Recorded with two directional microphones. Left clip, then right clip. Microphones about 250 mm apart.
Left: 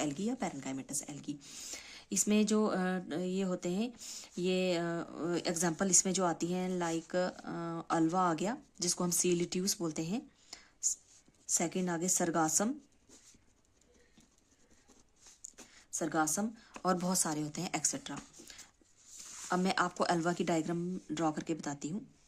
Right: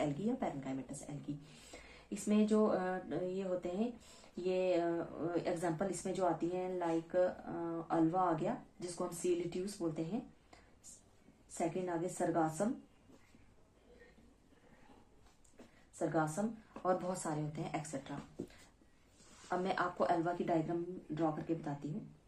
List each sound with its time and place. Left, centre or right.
0.0 s speech: left
11.5 s speech: left
16.0 s speech: left
19.5 s speech: left